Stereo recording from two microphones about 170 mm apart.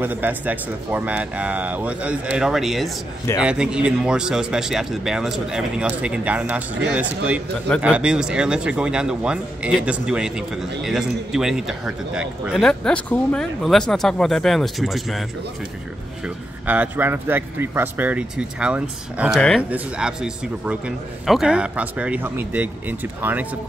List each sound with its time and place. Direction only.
0.0 s speech: 10° right (ahead or behind)
16.6 s speech: 10° right (ahead or behind)